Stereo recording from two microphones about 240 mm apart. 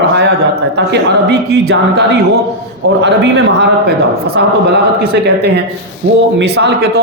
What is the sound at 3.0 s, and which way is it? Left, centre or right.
A man's voice, right.